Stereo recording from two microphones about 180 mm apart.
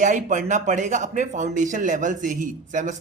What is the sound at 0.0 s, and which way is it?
Speech, 45° right (ahead or behind).